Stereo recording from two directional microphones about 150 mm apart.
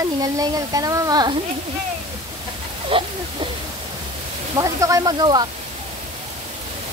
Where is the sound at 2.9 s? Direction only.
35° right (ahead or behind).